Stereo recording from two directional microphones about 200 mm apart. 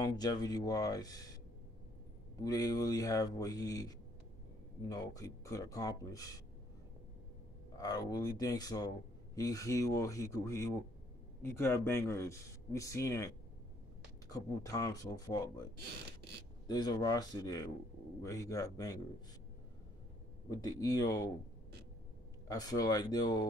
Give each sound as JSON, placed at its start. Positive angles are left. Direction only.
{"t": 0.0, "sound": "speech", "side_deg": 20}
{"t": 2.4, "sound": "speech", "side_deg": 20}
{"t": 4.8, "sound": "speech", "side_deg": 15}
{"t": 7.7, "sound": "speech", "side_deg": 20}
{"t": 14.3, "sound": "speech", "side_deg": 15}
{"t": 20.4, "sound": "speech", "side_deg": 20}
{"t": 22.5, "sound": "speech", "side_deg": 20}